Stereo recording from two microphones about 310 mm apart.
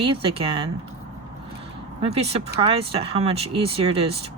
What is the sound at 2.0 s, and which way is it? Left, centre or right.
Speech, centre.